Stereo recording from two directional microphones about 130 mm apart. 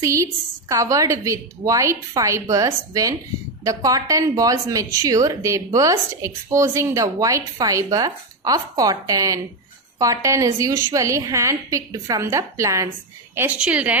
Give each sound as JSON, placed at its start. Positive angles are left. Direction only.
{"t": 0.0, "sound": "a woman's voice", "side_deg": -25}